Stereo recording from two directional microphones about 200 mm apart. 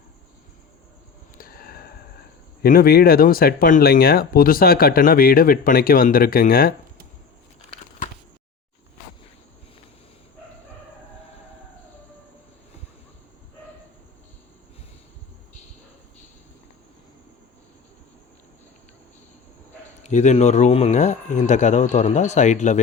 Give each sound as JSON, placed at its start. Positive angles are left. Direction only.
{"t": 1.4, "sound": "sniff", "side_deg": 45}
{"t": 2.6, "sound": "speech", "side_deg": 45}
{"t": 7.7, "sound": "a sound", "side_deg": 35}
{"t": 20.0, "sound": "speech", "side_deg": 35}